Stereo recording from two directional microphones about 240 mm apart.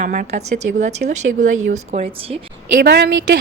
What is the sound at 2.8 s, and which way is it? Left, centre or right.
Speech, right.